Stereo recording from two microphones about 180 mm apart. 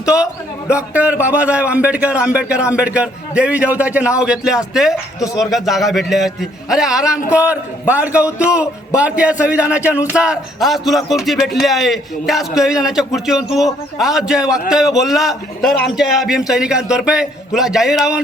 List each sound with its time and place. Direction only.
0.0 s a man's voice: 5° right (ahead or behind)
5.2 s speech: 20° left (ahead or behind)
5.5 s a man's voice: centre (ahead or behind)